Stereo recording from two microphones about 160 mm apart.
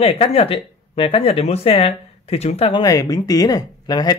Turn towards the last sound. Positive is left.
turn(degrees=25)  # may be behind; listen again after turning